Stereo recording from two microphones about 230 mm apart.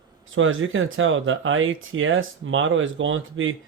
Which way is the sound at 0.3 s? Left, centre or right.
Right.